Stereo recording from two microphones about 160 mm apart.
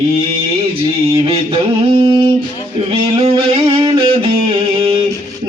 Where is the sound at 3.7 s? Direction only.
35° right (ahead or behind).